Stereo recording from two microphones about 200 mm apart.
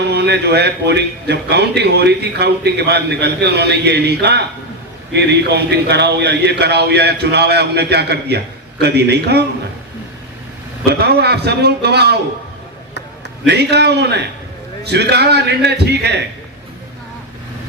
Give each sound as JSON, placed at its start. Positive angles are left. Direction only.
{"t": 0.1, "sound": "a man's voice", "side_deg": -55}
{"t": 10.8, "sound": "a man's voice", "side_deg": -55}
{"t": 13.5, "sound": "a man's voice", "side_deg": -55}